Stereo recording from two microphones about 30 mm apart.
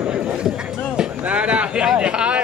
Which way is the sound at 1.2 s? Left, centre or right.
Right.